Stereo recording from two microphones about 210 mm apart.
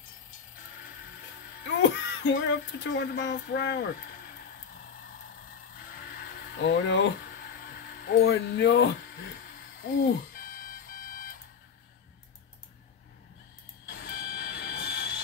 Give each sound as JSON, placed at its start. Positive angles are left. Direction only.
{"t": 1.8, "sound": "music", "side_deg": 60}
{"t": 3.0, "sound": "speech", "side_deg": 55}
{"t": 5.9, "sound": "a sound", "side_deg": 45}
{"t": 6.7, "sound": "speech", "side_deg": 60}
{"t": 7.6, "sound": "speech", "side_deg": 45}
{"t": 9.8, "sound": "music", "side_deg": 40}
{"t": 13.8, "sound": "vehicle", "side_deg": 45}